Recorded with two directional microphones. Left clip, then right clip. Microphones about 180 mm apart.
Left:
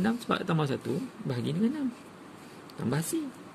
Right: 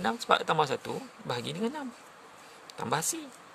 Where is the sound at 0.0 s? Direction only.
40° right (ahead or behind).